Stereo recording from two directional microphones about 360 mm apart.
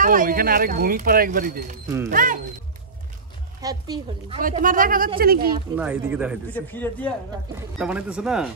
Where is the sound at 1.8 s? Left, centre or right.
Centre.